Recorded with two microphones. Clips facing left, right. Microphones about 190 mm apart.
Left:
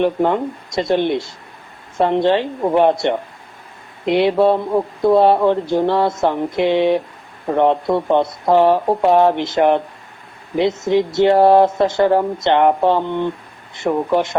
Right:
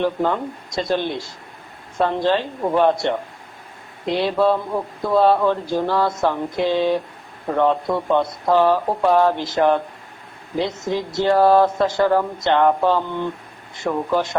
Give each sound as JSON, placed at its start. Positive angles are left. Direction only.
{"t": 0.0, "sound": "speech", "side_deg": 20}
{"t": 4.2, "sound": "speech", "side_deg": 25}